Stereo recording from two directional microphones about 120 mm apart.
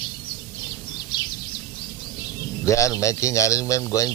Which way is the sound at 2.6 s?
25° left (ahead or behind).